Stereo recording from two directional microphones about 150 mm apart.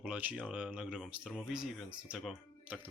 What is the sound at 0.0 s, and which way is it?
Speech, 10° right (ahead or behind).